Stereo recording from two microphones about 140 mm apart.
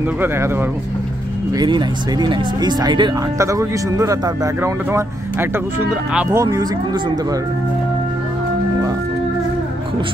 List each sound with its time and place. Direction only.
0.2 s speech: 15° right (ahead or behind)
1.5 s speech: 30° right (ahead or behind)